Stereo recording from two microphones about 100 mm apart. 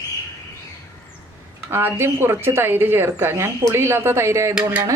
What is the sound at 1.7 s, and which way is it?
Speech, 25° right (ahead or behind).